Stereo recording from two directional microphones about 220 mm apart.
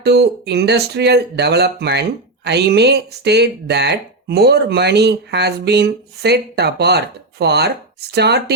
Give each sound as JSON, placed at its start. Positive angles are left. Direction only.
{"t": 0.0, "sound": "speech", "side_deg": -50}